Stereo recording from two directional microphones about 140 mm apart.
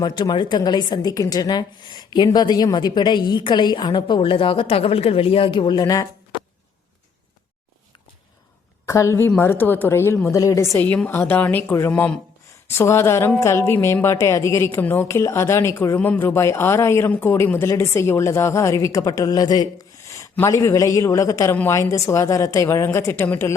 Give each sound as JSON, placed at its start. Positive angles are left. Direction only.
{"t": 0.0, "sound": "a woman's voice", "side_deg": 30}
{"t": 8.9, "sound": "a woman's voice", "side_deg": 20}
{"t": 10.8, "sound": "a woman's voice", "side_deg": 10}
{"t": 20.0, "sound": "a sound", "side_deg": 20}
{"t": 20.4, "sound": "speech", "side_deg": 20}